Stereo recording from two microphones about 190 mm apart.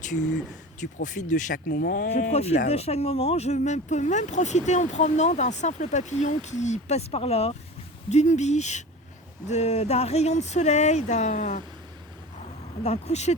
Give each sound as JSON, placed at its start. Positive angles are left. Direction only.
{"t": 0.8, "sound": "speech", "side_deg": 40}
{"t": 12.8, "sound": "speech", "side_deg": 35}